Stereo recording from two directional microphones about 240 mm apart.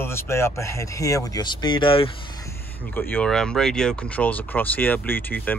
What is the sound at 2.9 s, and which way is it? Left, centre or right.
Speech, centre.